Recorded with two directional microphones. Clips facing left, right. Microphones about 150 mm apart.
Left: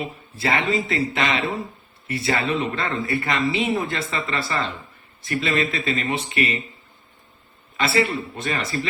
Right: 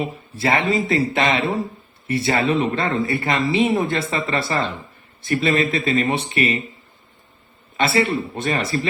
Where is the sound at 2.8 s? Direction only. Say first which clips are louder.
Right 4 dB; 30° right (ahead or behind).